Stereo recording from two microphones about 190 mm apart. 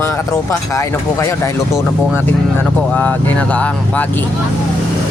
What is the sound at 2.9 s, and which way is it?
Speech, 10° left (ahead or behind).